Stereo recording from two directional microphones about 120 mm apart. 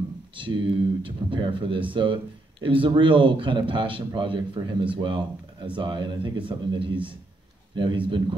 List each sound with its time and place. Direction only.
0.4 s a man's voice: 45° right (ahead or behind)